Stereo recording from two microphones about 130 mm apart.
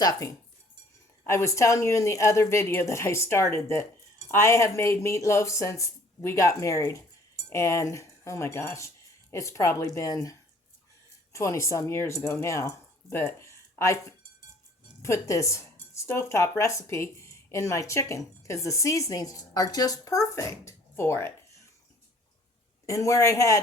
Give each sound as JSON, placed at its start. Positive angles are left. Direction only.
{"t": 0.0, "sound": "speech", "side_deg": 25}
{"t": 22.9, "sound": "speech", "side_deg": 25}